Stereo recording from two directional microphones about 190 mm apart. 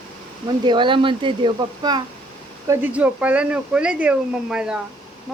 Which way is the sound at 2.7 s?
10° right (ahead or behind).